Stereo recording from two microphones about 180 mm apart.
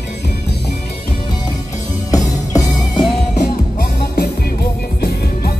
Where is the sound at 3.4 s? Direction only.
55° left (ahead or behind).